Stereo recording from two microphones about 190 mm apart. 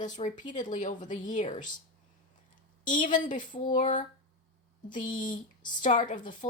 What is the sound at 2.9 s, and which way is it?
A woman's voice, 40° left (ahead or behind).